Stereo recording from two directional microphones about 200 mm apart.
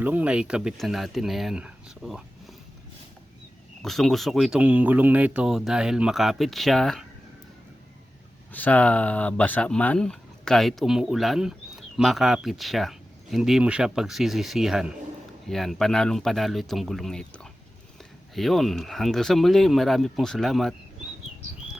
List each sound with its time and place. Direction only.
0.0 s speech: 10° right (ahead or behind)
3.8 s speech: centre (ahead or behind)
8.5 s speech: 5° left (ahead or behind)